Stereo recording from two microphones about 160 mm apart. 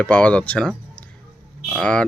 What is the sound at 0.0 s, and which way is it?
Speech, 5° left (ahead or behind).